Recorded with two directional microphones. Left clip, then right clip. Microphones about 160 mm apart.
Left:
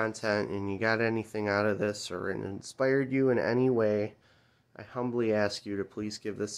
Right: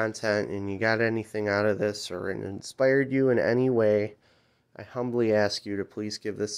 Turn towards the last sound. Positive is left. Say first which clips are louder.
# right 4 dB
turn(degrees=-25)  # may be behind; listen again after turning